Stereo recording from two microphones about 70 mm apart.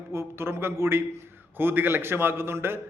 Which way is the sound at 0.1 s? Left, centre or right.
Right.